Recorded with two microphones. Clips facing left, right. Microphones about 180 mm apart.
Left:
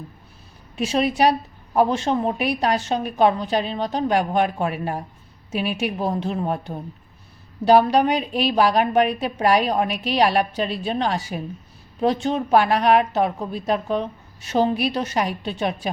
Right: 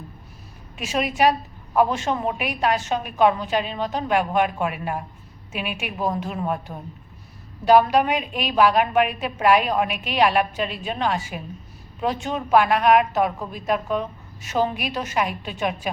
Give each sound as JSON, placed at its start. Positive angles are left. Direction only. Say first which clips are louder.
{"t": 0.8, "sound": "a woman's voice", "louder": "left 2 dB", "side_deg": 35}